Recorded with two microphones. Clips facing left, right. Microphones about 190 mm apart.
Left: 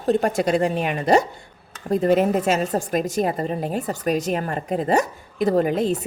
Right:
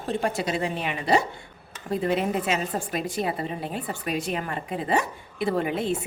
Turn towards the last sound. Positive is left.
turn(degrees=40)  # may be behind; listen again after turning